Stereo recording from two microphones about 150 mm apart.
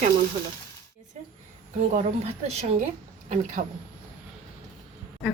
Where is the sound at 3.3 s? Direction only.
55° right (ahead or behind).